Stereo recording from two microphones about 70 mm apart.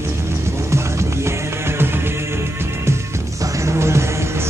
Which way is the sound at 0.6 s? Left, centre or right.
Right.